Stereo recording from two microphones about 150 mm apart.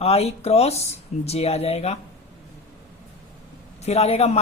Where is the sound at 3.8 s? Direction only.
45° left (ahead or behind).